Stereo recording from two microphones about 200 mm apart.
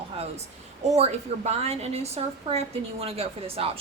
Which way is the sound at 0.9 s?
35° right (ahead or behind).